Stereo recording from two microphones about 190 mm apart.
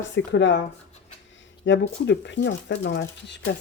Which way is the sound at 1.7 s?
65° left (ahead or behind).